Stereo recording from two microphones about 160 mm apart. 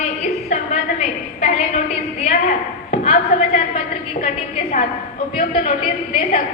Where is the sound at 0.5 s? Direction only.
45° left (ahead or behind).